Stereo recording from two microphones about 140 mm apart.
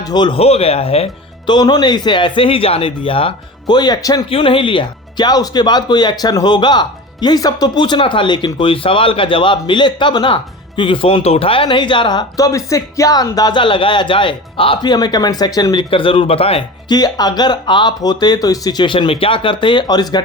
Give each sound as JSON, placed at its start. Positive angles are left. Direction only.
{"t": 0.0, "sound": "speech", "side_deg": 30}
{"t": 0.3, "sound": "speech", "side_deg": 45}
{"t": 1.5, "sound": "speech", "side_deg": 30}
{"t": 4.3, "sound": "speech", "side_deg": 40}
{"t": 16.9, "sound": "speech", "side_deg": 30}